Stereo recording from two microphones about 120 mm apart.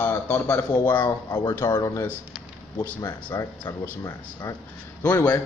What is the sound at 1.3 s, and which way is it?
A man's voice, 30° left (ahead or behind).